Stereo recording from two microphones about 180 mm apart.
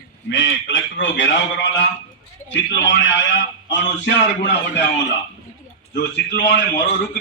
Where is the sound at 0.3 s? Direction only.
90° left.